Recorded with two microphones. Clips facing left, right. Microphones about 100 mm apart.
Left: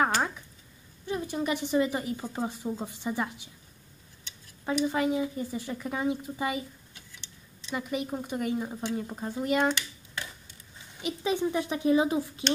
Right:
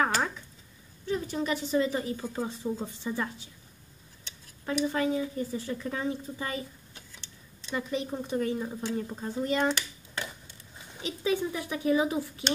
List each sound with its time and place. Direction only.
1.0 s a woman's voice: 15° left (ahead or behind)
4.6 s a woman's voice: 15° left (ahead or behind)
7.7 s a woman's voice: 10° left (ahead or behind)
11.0 s speech: 15° left (ahead or behind)